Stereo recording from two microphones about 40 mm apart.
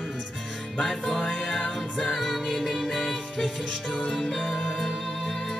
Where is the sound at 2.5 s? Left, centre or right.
Centre.